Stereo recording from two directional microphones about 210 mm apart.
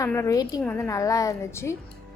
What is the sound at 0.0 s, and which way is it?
A woman's voice, 15° left (ahead or behind).